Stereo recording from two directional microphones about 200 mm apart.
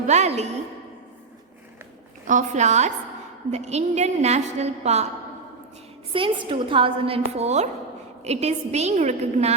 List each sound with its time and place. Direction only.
0.1 s a woman's voice: 35° right (ahead or behind)
2.2 s a woman's voice: 40° right (ahead or behind)
6.1 s a woman's voice: 25° right (ahead or behind)